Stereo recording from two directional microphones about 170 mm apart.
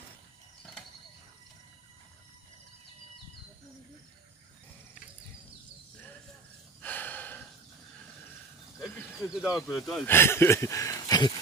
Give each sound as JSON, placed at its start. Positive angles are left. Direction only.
{"t": 6.8, "sound": "gasp", "side_deg": 10}
{"t": 8.8, "sound": "speech", "side_deg": -5}
{"t": 10.0, "sound": "speech", "side_deg": 15}